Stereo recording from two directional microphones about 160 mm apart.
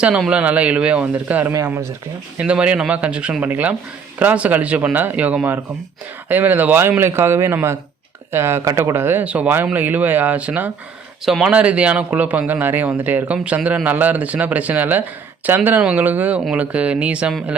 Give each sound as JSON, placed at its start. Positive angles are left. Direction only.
{"t": 0.0, "sound": "a man's voice", "side_deg": -5}